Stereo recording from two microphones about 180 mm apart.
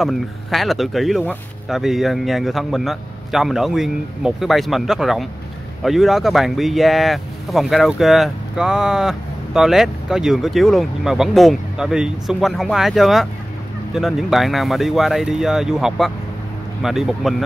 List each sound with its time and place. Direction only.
0.0 s speech: centre (ahead or behind)